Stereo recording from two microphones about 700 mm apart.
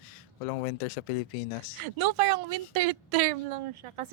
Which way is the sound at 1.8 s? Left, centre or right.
Right.